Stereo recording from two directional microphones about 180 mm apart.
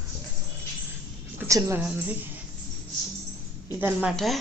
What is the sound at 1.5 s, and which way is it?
Speech, 15° right (ahead or behind).